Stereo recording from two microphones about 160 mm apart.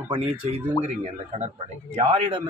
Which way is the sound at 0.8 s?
45° right (ahead or behind).